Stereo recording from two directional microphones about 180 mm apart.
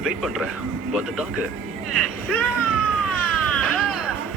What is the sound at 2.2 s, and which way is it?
Cat, 5° left (ahead or behind).